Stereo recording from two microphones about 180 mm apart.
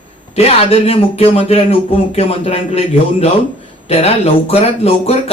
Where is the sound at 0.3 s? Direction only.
35° left (ahead or behind).